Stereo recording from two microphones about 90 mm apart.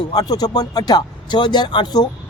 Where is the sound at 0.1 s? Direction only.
45° left (ahead or behind).